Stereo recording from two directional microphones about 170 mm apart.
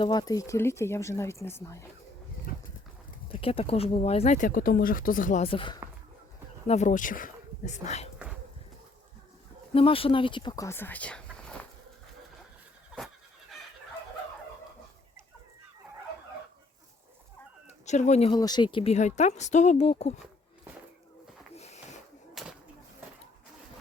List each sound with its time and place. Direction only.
0.0 s speech: 25° left (ahead or behind)
2.5 s horse: 55° left (ahead or behind)
3.3 s speech: 35° left (ahead or behind); by 5.4 s 55° left (ahead or behind)
5.4 s speech: 30° left (ahead or behind)
6.7 s speech: 45° left (ahead or behind)
9.7 s speech: 35° left (ahead or behind); by 11.6 s 5° left (ahead or behind)
17.8 s speech: 45° left (ahead or behind)
18.3 s speech: 25° left (ahead or behind)
21.5 s a sound: 40° left (ahead or behind)
22.4 s a sound: centre (ahead or behind)